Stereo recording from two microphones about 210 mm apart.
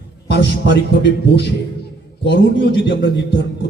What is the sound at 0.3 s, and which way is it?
A man's voice, 55° left (ahead or behind).